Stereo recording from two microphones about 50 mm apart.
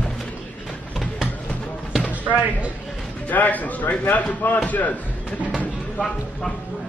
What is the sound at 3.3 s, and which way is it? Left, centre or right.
Speech, left.